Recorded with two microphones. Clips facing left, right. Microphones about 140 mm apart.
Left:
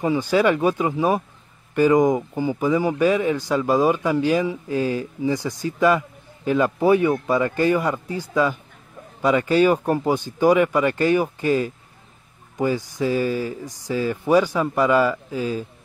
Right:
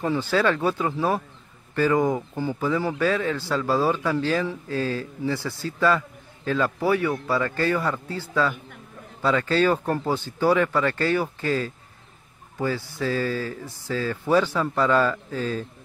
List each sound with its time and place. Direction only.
0.0 s speech: 15° left (ahead or behind)